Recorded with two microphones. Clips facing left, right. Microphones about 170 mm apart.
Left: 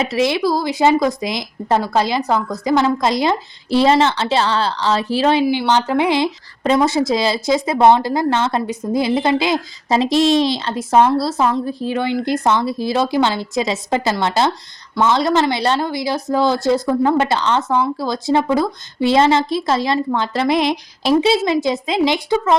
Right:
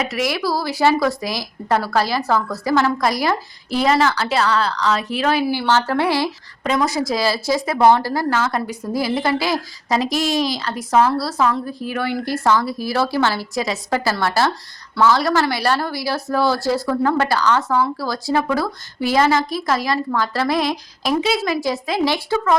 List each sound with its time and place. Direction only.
0.0 s speech: 25° left (ahead or behind)